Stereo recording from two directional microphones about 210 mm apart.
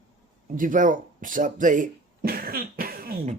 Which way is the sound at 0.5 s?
40° right (ahead or behind).